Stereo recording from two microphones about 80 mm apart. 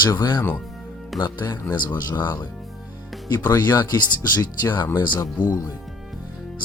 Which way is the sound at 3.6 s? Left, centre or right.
Left.